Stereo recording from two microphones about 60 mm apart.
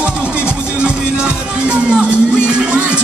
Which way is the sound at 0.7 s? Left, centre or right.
Centre.